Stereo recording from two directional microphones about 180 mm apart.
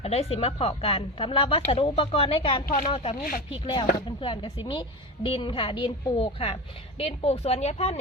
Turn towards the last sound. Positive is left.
turn(degrees=35)  # may be behind; listen again after turning